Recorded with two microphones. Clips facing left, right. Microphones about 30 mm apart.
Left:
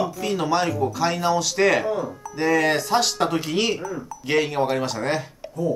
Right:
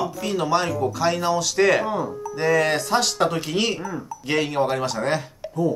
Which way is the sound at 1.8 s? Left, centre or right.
Centre.